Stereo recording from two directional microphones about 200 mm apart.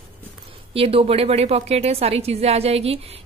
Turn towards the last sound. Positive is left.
turn(degrees=-30)  # may be behind; listen again after turning